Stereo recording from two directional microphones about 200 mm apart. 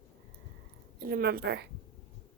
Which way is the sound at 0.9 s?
50° right (ahead or behind).